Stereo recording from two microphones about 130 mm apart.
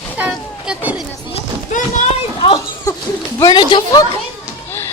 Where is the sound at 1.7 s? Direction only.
65° left (ahead or behind).